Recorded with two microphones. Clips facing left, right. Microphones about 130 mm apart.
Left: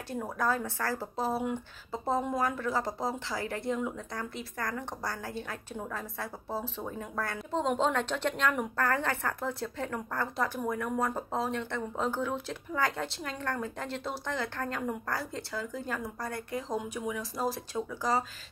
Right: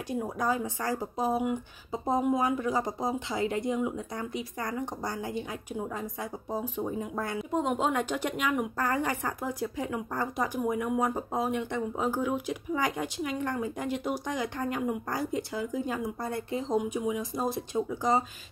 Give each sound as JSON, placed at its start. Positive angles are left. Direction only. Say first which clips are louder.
{"t": 0.1, "sound": "a woman's voice", "louder": "right 1 dB", "side_deg": -15}
{"t": 6.5, "sound": "a woman's voice", "louder": "right 5 dB", "side_deg": -15}
{"t": 7.3, "sound": "a woman's voice", "louder": "right 1 dB", "side_deg": -5}